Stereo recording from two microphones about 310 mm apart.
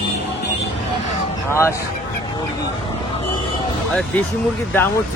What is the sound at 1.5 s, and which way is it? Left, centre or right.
Speech, centre.